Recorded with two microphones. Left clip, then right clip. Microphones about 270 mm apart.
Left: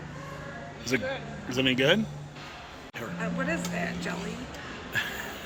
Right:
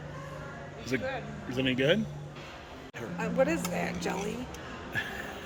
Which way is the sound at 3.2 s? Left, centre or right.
Right.